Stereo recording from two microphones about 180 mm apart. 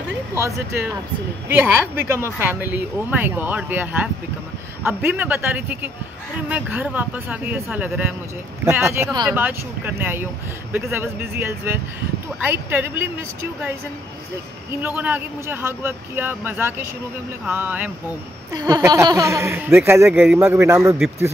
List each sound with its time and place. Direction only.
1.5 s speech: 10° right (ahead or behind)
14.7 s speech: 10° right (ahead or behind)
20.1 s a man's voice: centre (ahead or behind)
20.3 s speech: 15° right (ahead or behind)